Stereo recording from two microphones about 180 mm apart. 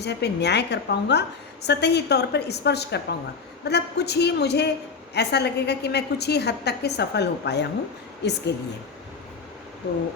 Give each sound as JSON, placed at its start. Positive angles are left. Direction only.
{"t": 0.0, "sound": "a woman's voice", "side_deg": 70}